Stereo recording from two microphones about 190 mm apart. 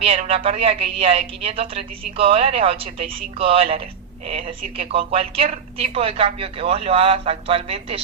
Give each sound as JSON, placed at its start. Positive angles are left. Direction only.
{"t": 0.0, "sound": "a woman's voice", "side_deg": -30}